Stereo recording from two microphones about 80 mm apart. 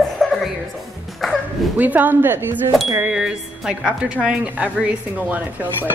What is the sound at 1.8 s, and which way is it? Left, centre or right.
Speech, right.